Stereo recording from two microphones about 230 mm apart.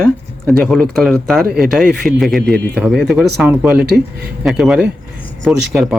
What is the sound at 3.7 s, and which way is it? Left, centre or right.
Speech, right.